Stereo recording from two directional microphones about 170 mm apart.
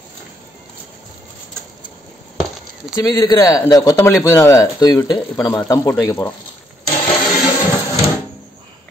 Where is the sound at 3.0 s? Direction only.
20° left (ahead or behind).